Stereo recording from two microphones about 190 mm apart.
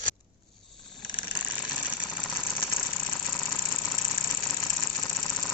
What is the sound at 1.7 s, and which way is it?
Engine, 5° right (ahead or behind).